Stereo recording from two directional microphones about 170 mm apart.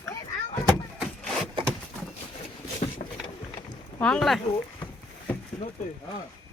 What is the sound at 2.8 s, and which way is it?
Boat, 35° left (ahead or behind).